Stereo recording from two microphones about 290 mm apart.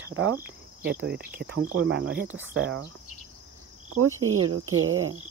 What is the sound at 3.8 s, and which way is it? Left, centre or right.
Speech, right.